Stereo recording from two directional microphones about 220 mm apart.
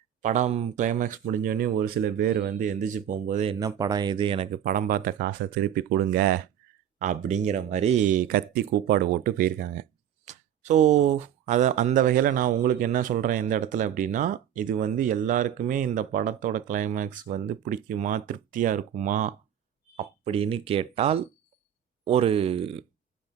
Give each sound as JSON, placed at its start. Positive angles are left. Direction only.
{"t": 0.2, "sound": "speech", "side_deg": -35}
{"t": 3.6, "sound": "speech", "side_deg": -15}
{"t": 4.5, "sound": "speech", "side_deg": -35}
{"t": 7.0, "sound": "speech", "side_deg": -35}